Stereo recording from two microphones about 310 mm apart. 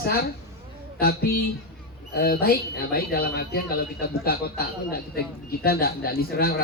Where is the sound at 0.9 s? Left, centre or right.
Left.